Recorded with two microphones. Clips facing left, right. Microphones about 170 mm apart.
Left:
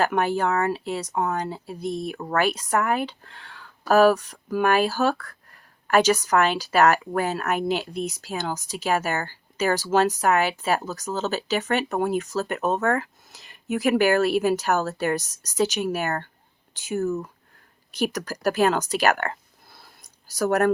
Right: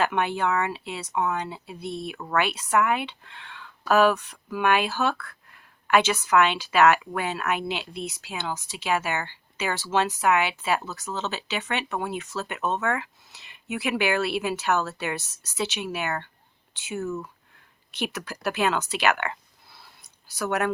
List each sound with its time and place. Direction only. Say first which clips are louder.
0.0 s speech: left 2 dB; 40° left (ahead or behind)